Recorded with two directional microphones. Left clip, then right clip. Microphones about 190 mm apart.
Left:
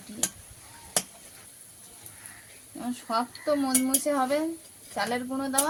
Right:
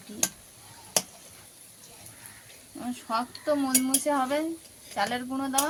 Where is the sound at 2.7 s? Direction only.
35° left (ahead or behind).